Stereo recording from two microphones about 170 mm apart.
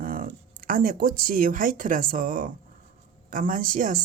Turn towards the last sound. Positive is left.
turn(degrees=-50)  # may be behind; listen again after turning